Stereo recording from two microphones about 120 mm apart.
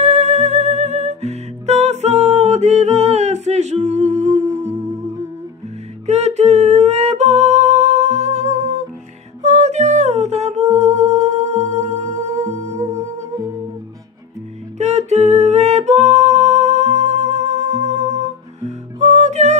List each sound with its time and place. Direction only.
0.0 s music: 65° right (ahead or behind)
6.0 s humming: 65° right (ahead or behind)
9.4 s music: 70° right (ahead or behind)
14.8 s music: 70° right (ahead or behind)